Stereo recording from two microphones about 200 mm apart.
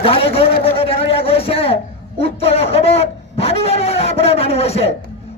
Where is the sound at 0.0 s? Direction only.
30° left (ahead or behind).